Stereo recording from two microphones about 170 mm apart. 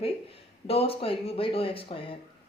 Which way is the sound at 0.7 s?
35° left (ahead or behind).